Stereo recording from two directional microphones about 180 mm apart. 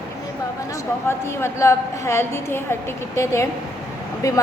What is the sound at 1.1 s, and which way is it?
A woman's voice, 15° left (ahead or behind).